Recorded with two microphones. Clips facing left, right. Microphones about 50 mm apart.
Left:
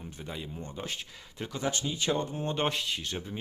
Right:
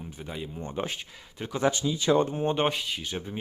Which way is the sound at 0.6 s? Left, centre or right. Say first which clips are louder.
Right 7 dB; right.